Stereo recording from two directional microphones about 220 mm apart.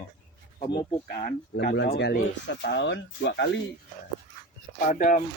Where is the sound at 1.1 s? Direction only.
40° left (ahead or behind).